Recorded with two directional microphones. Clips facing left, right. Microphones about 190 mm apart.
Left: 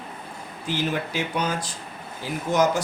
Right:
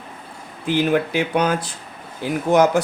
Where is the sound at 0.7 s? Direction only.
55° right (ahead or behind).